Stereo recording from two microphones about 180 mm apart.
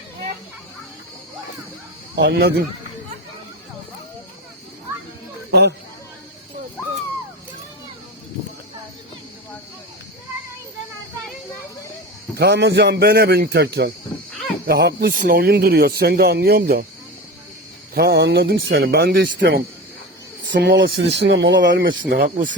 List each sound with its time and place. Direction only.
2.1 s speech: 70° right (ahead or behind)
5.5 s speech: 70° right (ahead or behind)
12.4 s speech: 70° right (ahead or behind)
17.9 s speech: 65° right (ahead or behind); by 22.3 s 90° right